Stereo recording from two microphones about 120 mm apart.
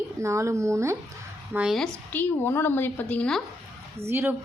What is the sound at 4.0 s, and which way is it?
Speech, 20° right (ahead or behind).